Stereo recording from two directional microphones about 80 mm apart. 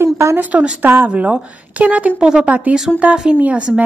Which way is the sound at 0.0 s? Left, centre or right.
Right.